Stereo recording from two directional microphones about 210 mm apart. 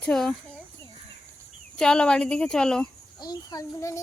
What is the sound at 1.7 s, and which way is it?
Speech, 5° left (ahead or behind).